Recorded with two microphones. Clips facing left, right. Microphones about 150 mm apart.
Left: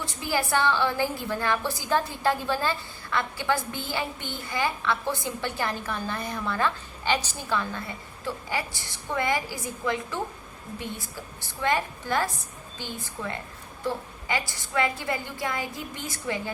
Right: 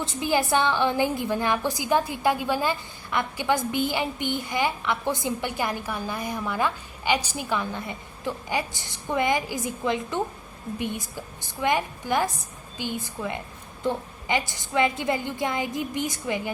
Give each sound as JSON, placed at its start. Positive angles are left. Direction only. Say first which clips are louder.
{"t": 0.0, "sound": "a woman's voice", "louder": "right 4 dB", "side_deg": -20}